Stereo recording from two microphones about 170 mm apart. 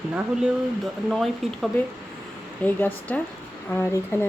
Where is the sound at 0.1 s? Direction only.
5° right (ahead or behind).